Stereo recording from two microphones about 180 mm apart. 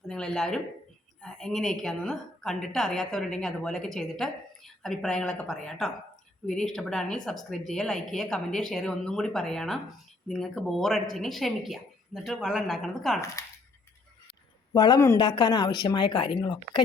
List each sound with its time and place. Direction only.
0.1 s a woman's voice: 5° left (ahead or behind)
13.4 s a sound: 15° left (ahead or behind)
14.7 s speech: 20° left (ahead or behind)